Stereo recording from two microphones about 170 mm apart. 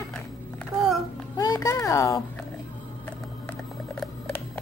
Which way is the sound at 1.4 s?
20° left (ahead or behind).